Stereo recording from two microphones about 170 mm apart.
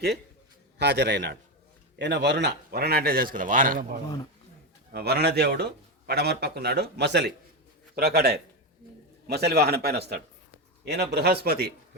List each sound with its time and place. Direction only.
0.8 s a man's voice: 90° right; by 3.8 s 55° right (ahead or behind)
4.9 s a man's voice: 65° right (ahead or behind); by 7.3 s 90° right
7.9 s a man's voice: 70° right (ahead or behind)